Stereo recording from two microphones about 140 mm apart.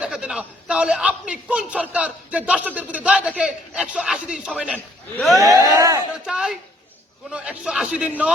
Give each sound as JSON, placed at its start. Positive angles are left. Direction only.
{"t": 0.0, "sound": "a man's voice", "side_deg": -5}
{"t": 5.4, "sound": "speech", "side_deg": -25}
{"t": 6.2, "sound": "a man's voice", "side_deg": -5}